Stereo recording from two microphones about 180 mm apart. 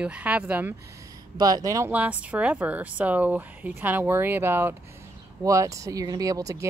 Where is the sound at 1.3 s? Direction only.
20° right (ahead or behind).